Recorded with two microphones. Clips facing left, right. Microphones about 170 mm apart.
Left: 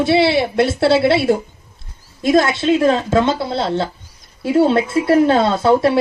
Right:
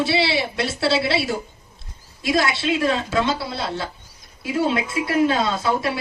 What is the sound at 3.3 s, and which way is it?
Speech, 25° left (ahead or behind).